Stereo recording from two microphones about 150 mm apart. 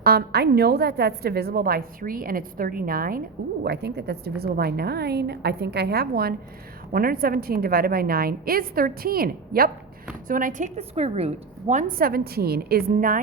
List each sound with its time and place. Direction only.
0.0 s a woman's voice: 90° right
6.9 s a woman's voice: 80° right
10.2 s a woman's voice: 65° right (ahead or behind)
10.8 s a woman's voice: 45° right (ahead or behind)
11.7 s a woman's voice: 65° right (ahead or behind)